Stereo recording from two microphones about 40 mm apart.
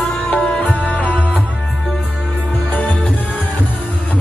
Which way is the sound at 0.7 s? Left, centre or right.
Left.